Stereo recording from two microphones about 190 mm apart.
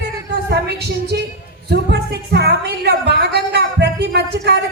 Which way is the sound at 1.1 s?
60° right (ahead or behind).